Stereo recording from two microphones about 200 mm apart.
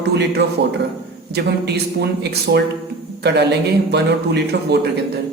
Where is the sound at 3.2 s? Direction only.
55° right (ahead or behind).